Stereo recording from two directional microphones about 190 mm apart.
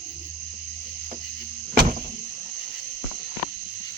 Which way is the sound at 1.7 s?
50° right (ahead or behind).